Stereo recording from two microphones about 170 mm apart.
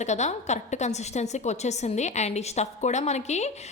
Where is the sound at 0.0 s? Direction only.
40° left (ahead or behind).